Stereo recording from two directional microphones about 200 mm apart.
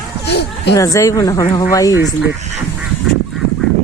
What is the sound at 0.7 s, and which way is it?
A woman's voice, 15° left (ahead or behind).